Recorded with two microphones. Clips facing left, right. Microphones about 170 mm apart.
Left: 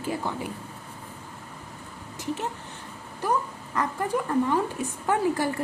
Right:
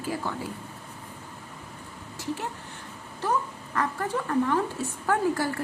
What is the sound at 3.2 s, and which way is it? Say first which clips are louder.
Crow: left 1 dB; 15° left (ahead or behind).